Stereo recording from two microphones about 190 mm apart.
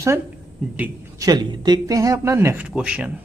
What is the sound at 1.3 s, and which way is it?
Speech, 20° right (ahead or behind).